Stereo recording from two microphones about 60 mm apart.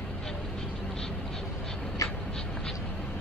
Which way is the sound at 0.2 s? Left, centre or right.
Centre.